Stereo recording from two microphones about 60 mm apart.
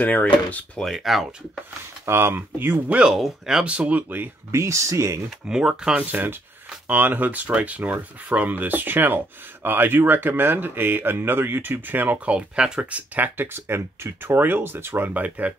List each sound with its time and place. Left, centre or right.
0.0 s speech: left
0.8 s speech: centre
2.0 s speech: right
3.1 s speech: centre
3.6 s speech: right
4.5 s speech: right
5.5 s speech: centre
6.1 s speech: right
12.3 s speech: centre
13.1 s speech: right